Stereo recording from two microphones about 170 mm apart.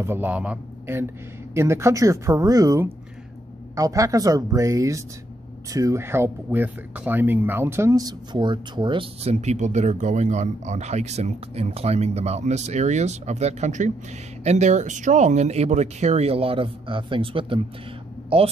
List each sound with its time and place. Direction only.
0.0 s speech: 10° right (ahead or behind); by 17.6 s 30° right (ahead or behind)